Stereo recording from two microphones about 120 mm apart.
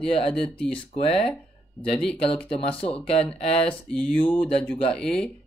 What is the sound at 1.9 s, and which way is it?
Speech, 5° left (ahead or behind).